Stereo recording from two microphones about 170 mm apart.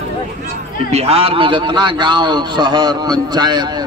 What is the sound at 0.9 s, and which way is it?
A man's voice, 35° right (ahead or behind).